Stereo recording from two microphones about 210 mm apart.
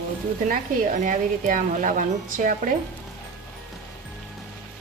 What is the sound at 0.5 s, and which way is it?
Speech, 40° right (ahead or behind).